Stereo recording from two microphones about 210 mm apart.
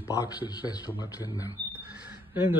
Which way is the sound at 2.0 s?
10° right (ahead or behind).